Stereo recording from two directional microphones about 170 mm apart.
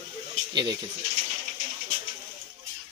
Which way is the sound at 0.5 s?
25° right (ahead or behind).